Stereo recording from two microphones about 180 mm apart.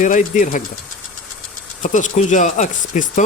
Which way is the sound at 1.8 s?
45° left (ahead or behind).